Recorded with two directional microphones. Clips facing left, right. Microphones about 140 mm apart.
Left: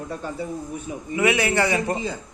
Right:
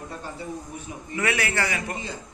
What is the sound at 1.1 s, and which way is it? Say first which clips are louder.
Speech: left 6 dB; 20° left (ahead or behind).